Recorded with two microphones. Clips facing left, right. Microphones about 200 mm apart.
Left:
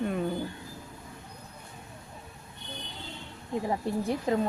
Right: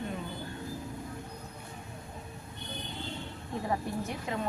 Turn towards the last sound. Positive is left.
turn(degrees=40)  # may be behind; listen again after turning